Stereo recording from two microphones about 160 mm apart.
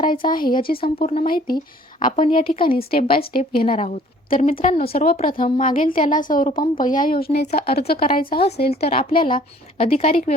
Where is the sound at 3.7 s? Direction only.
40° left (ahead or behind).